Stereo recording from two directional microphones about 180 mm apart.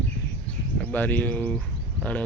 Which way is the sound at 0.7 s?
10° left (ahead or behind).